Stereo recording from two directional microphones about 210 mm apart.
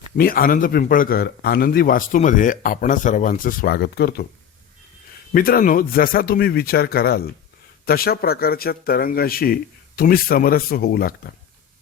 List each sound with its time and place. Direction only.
0.2 s speech: 45° left (ahead or behind)
5.3 s speech: 45° left (ahead or behind)